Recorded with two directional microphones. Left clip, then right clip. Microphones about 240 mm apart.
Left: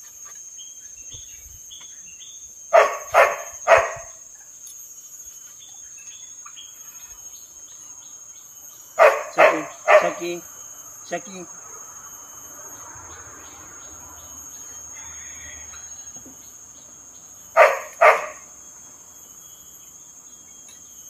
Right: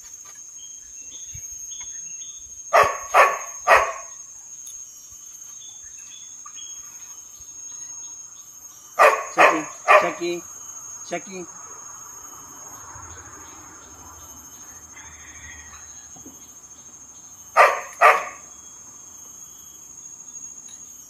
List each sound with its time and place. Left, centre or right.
2.7 s dog: right
8.9 s dog: right
10.1 s speech: centre
17.6 s dog: right